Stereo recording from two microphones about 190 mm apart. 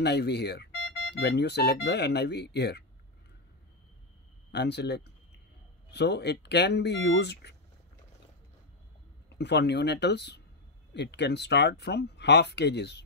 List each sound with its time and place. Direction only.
0.0 s speech: 60° left (ahead or behind)
4.5 s speech: 60° left (ahead or behind)
9.4 s speech: 60° left (ahead or behind)